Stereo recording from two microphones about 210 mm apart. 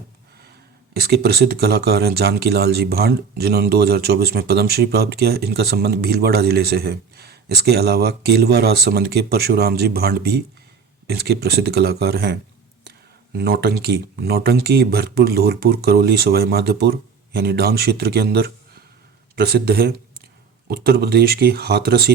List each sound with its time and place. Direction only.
0.9 s speech: 50° right (ahead or behind)